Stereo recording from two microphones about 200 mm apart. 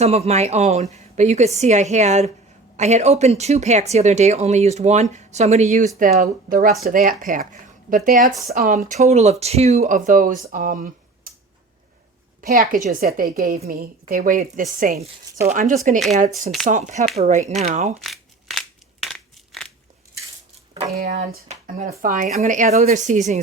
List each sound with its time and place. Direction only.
0.0 s speech: 30° right (ahead or behind)
12.4 s speech: 45° right (ahead or behind)
18.0 s a sound: centre (ahead or behind)
21.0 s speech: 45° right (ahead or behind)